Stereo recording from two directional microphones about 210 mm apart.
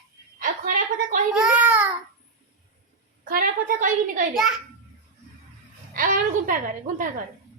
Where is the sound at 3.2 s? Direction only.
40° right (ahead or behind).